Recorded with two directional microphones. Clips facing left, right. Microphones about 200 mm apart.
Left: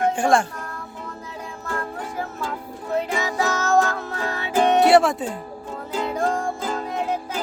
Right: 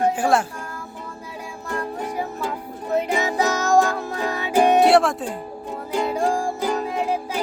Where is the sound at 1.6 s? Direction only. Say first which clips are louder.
Right 3 dB; 15° right (ahead or behind).